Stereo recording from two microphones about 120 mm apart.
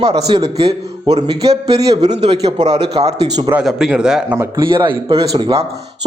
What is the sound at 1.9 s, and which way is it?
A man's voice, 65° right (ahead or behind).